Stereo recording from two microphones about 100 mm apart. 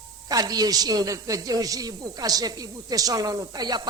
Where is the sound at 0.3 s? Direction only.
40° right (ahead or behind).